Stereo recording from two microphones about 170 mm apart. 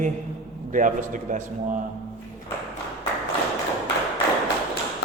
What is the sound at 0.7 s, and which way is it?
Speech, 50° right (ahead or behind).